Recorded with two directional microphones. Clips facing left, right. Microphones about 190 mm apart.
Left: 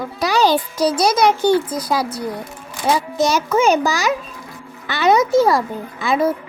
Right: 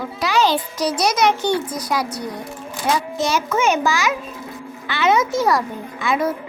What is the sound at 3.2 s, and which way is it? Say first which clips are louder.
A child's voice: left 4 dB; 40° left (ahead or behind).